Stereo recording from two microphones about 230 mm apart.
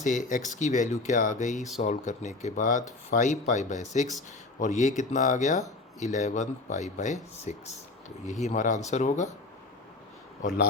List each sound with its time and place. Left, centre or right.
0.0 s speech: left